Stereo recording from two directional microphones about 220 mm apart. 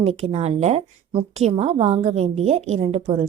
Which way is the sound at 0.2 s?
30° right (ahead or behind).